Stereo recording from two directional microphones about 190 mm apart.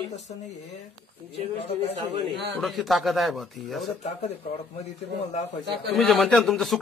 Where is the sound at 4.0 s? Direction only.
35° left (ahead or behind).